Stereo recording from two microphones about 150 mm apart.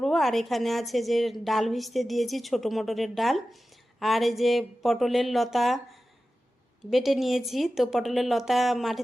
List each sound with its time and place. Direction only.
0.0 s a woman's voice: centre (ahead or behind)